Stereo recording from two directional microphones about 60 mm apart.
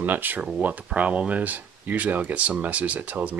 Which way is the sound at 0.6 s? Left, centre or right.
Right.